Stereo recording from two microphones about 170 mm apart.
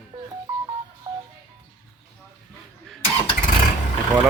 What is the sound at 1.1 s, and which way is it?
Music, 15° right (ahead or behind).